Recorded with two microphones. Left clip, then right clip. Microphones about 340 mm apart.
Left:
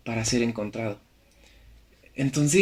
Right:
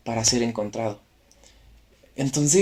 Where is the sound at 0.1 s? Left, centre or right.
Centre.